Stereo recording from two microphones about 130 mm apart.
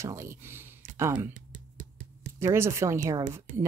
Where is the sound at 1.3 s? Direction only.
90° right.